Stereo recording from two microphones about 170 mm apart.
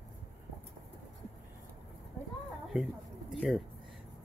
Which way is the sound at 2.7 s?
Centre (ahead or behind).